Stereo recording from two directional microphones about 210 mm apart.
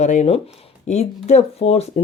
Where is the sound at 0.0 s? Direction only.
35° left (ahead or behind).